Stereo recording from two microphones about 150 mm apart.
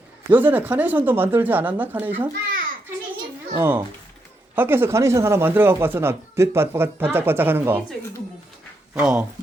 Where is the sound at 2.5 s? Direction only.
70° right (ahead or behind).